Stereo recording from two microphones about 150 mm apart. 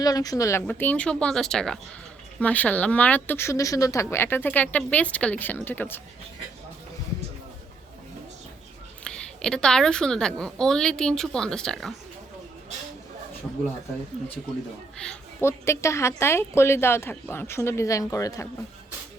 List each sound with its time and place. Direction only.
0.0 s speech: 25° left (ahead or behind)
9.0 s a woman's voice: 5° left (ahead or behind)
14.9 s a woman's voice: 5° left (ahead or behind)
15.4 s speech: 15° left (ahead or behind)